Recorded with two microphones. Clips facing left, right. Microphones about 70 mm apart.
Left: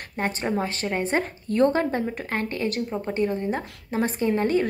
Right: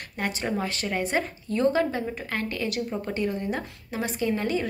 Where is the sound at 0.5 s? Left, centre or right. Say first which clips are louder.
Left 2 dB; left.